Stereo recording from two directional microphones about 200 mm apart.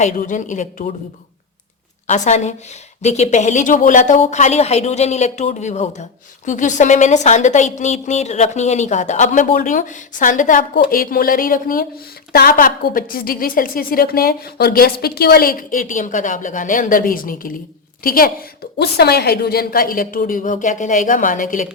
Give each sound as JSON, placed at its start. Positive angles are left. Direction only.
{"t": 0.0, "sound": "a woman's voice", "side_deg": 40}
{"t": 2.0, "sound": "a woman's voice", "side_deg": 35}